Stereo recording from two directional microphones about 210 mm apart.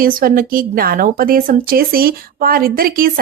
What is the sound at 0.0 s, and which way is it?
Speech, 45° right (ahead or behind).